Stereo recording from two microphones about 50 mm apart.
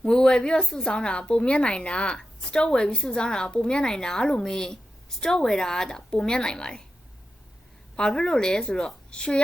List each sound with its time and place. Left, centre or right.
0.0 s a sound: centre
0.8 s a woman's voice: centre
7.9 s a woman's voice: centre